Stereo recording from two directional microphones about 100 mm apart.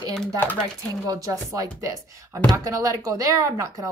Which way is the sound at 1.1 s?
35° right (ahead or behind).